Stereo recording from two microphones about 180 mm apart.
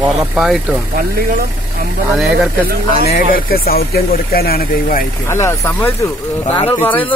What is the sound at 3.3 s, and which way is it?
Speech, 55° left (ahead or behind).